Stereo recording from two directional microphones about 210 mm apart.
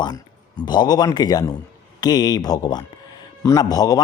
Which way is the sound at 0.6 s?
20° left (ahead or behind).